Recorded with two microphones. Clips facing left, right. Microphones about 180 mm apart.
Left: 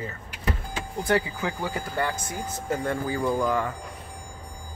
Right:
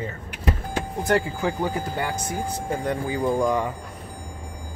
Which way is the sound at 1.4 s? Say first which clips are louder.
Right 5 dB; 20° right (ahead or behind).